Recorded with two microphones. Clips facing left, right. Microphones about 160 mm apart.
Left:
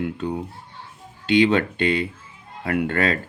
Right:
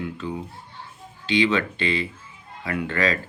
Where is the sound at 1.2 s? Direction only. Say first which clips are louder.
Left 4 dB; 55° left (ahead or behind).